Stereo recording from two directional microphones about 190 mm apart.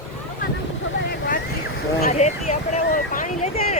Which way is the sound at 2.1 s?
35° left (ahead or behind).